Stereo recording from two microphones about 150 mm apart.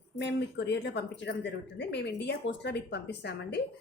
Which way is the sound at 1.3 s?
90° left.